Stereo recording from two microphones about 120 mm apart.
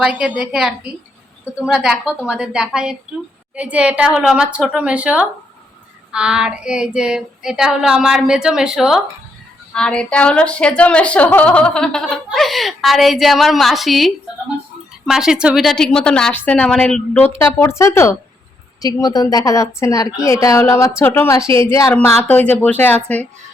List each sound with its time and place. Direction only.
0.0 s child singing: 10° right (ahead or behind)
9.7 s a woman's voice: 5° left (ahead or behind)
17.2 s a woman's voice: 25° left (ahead or behind)